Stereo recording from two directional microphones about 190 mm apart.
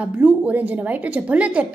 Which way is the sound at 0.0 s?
5° right (ahead or behind).